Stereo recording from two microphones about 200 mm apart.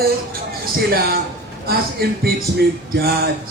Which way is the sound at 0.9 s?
50° right (ahead or behind).